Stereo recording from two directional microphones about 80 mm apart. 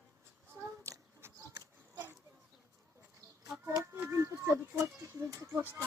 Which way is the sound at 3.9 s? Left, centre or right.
Right.